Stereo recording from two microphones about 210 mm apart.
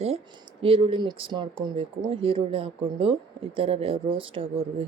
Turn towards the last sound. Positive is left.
turn(degrees=-25)  # may be behind; listen again after turning